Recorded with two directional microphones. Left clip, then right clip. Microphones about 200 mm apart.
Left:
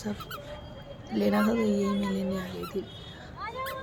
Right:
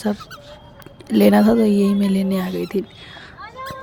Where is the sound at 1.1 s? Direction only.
50° right (ahead or behind).